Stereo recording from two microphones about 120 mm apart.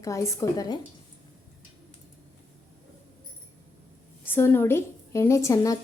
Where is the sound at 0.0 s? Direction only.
25° left (ahead or behind).